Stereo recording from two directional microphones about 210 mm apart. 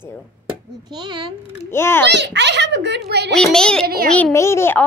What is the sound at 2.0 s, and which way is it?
A child's voice, 55° right (ahead or behind).